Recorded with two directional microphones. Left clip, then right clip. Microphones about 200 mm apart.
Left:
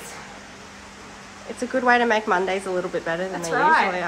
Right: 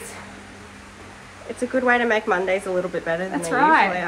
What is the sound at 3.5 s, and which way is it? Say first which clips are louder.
Speech: right 1 dB; 45° right (ahead or behind).